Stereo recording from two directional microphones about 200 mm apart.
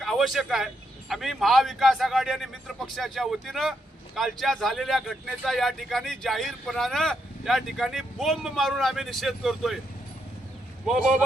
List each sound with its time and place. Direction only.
0.0 s speech: centre (ahead or behind)
10.8 s speech: centre (ahead or behind)